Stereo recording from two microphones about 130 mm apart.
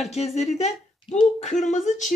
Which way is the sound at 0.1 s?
55° left (ahead or behind).